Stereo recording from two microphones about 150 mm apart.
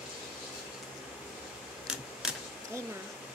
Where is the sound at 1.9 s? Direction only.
5° right (ahead or behind).